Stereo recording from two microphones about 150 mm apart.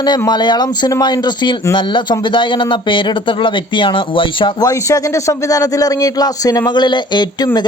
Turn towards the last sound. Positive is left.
turn(degrees=30)  # may be behind; listen again after turning